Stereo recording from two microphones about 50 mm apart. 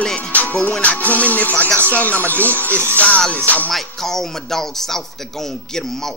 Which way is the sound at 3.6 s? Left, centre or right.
Centre.